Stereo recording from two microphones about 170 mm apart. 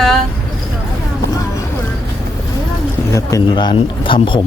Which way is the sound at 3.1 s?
20° left (ahead or behind).